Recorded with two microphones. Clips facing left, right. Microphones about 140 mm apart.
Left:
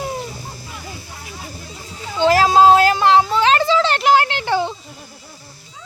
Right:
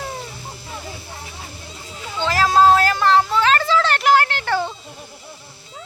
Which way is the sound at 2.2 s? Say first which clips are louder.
Left 3 dB; 30° left (ahead or behind).